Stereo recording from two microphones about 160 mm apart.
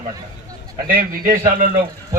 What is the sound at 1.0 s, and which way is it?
Speech, 60° right (ahead or behind).